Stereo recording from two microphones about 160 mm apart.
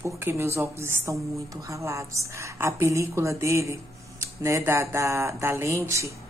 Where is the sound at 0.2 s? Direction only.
15° right (ahead or behind).